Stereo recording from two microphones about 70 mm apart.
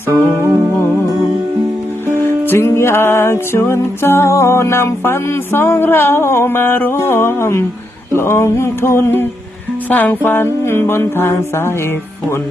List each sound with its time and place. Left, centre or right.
2.5 s music: left
9.9 s music: left